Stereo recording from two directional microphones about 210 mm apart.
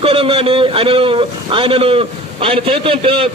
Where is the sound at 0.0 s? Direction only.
25° right (ahead or behind).